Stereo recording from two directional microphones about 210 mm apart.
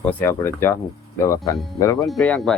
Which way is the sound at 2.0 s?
Centre (ahead or behind).